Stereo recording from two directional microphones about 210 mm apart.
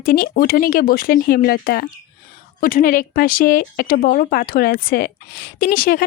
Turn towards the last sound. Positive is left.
turn(degrees=40)  # may be behind; listen again after turning